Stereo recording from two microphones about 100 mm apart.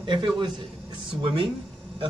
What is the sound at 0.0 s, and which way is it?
A man's voice, 55° right (ahead or behind).